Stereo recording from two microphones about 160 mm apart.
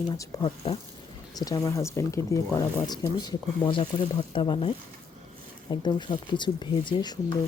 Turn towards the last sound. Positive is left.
turn(degrees=30)  # may be behind; listen again after turning